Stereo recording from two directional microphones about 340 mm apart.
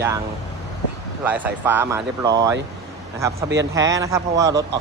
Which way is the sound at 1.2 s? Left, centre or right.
Centre.